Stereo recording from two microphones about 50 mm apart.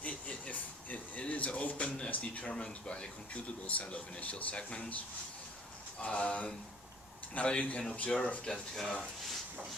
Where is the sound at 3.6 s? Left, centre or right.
Left.